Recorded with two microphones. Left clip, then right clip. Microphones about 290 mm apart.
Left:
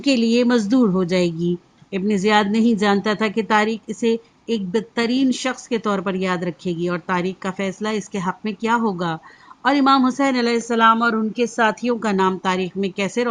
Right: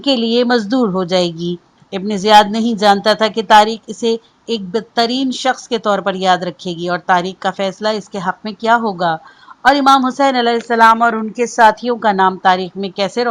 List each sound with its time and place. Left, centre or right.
0.3 s speech: centre
10.8 s speech: right
11.9 s speech: centre